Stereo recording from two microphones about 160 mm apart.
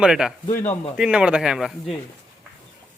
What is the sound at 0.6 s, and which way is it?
Speech, 45° left (ahead or behind).